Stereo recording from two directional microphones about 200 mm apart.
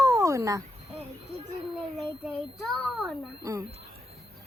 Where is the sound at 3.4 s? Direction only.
15° right (ahead or behind).